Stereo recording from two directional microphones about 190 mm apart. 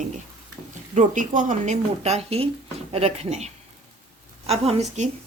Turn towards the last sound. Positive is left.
turn(degrees=-35)  # may be behind; listen again after turning